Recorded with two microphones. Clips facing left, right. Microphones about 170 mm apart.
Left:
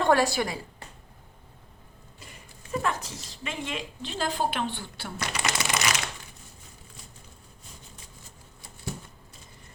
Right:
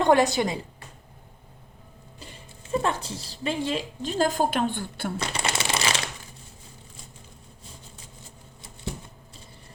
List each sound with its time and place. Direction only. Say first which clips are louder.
0.0 s a woman's voice: right 3 dB; 20° right (ahead or behind)
2.1 s a woman's voice: right 4 dB; 30° right (ahead or behind); by 5.1 s 50° right (ahead or behind)
5.1 s shuffling cards: left 1 dB; 30° right (ahead or behind)